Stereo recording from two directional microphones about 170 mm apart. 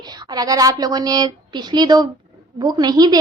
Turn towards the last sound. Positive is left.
turn(degrees=-25)  # may be behind; listen again after turning